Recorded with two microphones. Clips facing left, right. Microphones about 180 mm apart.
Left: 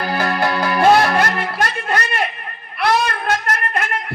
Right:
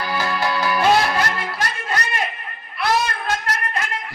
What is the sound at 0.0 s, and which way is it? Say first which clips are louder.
Music: left 4 dB; 55° left (ahead or behind).